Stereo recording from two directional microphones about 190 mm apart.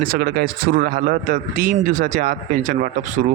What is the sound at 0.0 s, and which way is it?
A man's voice, 55° right (ahead or behind).